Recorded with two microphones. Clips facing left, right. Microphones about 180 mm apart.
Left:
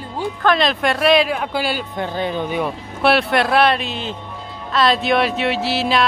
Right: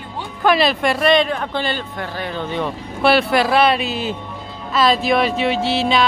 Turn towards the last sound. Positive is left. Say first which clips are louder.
# right 1 dB
turn(degrees=0)  # may be behind; listen again after turning